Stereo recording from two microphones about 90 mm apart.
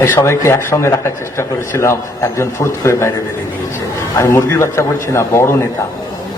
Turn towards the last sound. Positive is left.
turn(degrees=30)  # may be behind; listen again after turning